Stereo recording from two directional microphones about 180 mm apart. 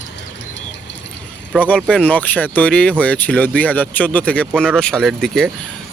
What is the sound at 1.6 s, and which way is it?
Speech, 5° left (ahead or behind).